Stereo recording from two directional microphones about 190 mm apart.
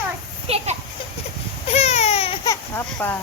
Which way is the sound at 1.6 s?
35° left (ahead or behind).